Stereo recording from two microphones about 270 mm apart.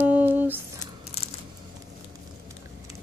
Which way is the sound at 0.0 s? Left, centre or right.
Centre.